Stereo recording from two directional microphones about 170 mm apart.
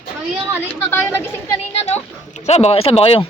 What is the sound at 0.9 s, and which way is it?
Speech, 15° left (ahead or behind).